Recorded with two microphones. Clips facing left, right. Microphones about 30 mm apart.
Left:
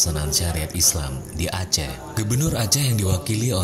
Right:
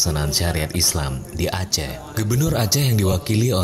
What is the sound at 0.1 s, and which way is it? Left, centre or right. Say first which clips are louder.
Speech: right 3 dB; centre.